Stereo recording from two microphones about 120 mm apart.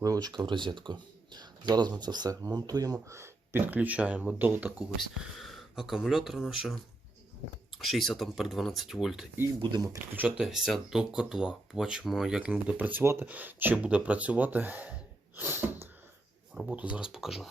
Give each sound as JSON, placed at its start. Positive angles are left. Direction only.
{"t": 0.0, "sound": "speech", "side_deg": -30}
{"t": 5.2, "sound": "speech", "side_deg": 0}
{"t": 7.8, "sound": "speech", "side_deg": 0}
{"t": 9.6, "sound": "speech", "side_deg": -40}
{"t": 10.3, "sound": "speech", "side_deg": -5}
{"t": 15.4, "sound": "sneeze", "side_deg": -20}
{"t": 16.7, "sound": "speech", "side_deg": -10}